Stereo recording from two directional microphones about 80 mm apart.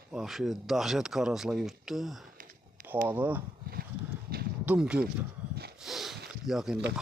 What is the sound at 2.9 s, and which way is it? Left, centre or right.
Speech, right.